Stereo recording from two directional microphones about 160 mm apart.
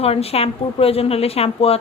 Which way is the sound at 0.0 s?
40° left (ahead or behind).